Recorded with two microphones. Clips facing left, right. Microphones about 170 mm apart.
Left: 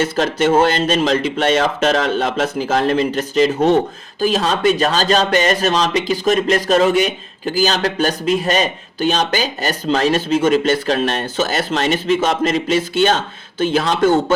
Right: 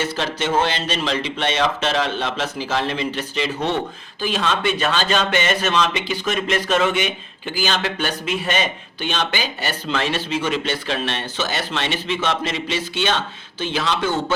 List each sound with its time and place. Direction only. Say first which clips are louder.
0.0 s speech: left 7 dB; 50° left (ahead or behind)